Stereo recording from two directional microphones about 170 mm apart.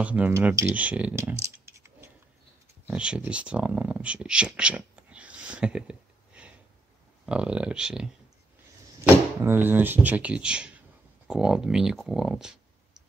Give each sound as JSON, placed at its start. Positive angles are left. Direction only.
{"t": 0.0, "sound": "speech", "side_deg": -10}
{"t": 1.4, "sound": "a sound", "side_deg": -15}
{"t": 2.9, "sound": "speech", "side_deg": -5}